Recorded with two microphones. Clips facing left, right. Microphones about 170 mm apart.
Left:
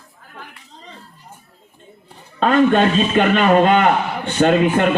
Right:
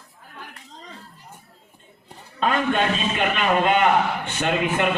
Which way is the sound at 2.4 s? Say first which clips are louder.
Left 8 dB; 40° left (ahead or behind).